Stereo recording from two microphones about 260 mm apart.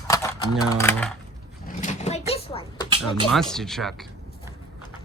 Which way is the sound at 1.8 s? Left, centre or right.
Left.